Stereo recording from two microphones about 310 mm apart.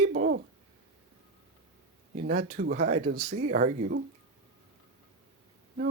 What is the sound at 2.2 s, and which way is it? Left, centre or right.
Speech, right.